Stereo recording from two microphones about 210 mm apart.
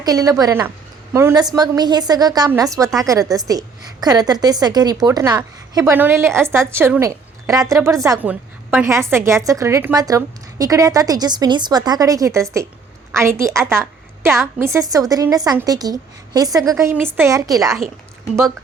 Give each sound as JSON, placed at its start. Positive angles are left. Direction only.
{"t": 0.0, "sound": "a woman's voice", "side_deg": -15}